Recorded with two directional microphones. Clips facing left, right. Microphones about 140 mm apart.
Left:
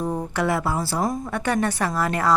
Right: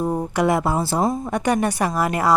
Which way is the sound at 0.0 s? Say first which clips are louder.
Right 4 dB; 15° right (ahead or behind).